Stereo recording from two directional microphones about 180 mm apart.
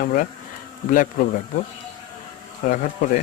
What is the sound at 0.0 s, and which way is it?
Speech, 45° left (ahead or behind).